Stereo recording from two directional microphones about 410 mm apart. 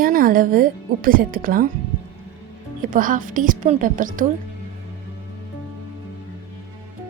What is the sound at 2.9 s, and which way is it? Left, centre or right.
A woman's voice, centre.